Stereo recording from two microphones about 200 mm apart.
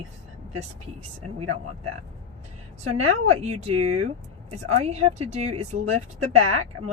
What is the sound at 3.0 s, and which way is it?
Speech, 30° right (ahead or behind).